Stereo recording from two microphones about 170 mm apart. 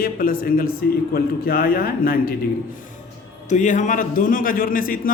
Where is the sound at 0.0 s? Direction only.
55° left (ahead or behind).